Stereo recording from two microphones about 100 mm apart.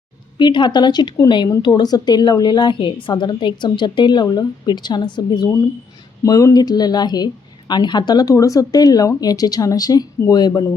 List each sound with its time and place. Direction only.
0.3 s a woman's voice: 50° left (ahead or behind)
6.2 s speech: 35° left (ahead or behind)